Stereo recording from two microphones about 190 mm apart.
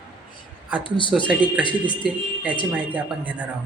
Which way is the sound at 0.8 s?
25° left (ahead or behind).